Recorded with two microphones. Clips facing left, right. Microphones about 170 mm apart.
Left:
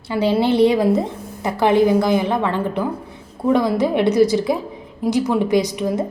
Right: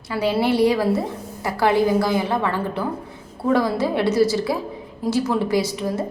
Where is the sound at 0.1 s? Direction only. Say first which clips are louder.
Left 3 dB; 25° left (ahead or behind).